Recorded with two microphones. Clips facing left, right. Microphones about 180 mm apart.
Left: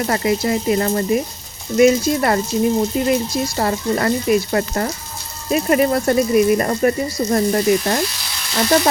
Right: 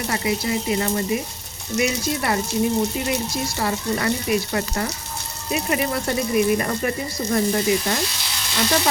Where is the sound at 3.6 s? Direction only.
45° left (ahead or behind).